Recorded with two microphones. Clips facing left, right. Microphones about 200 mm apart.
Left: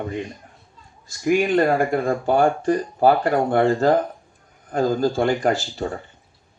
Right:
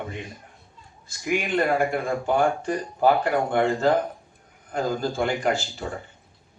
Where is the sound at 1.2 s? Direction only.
40° left (ahead or behind).